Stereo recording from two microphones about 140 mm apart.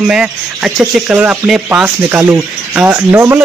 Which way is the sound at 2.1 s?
15° right (ahead or behind).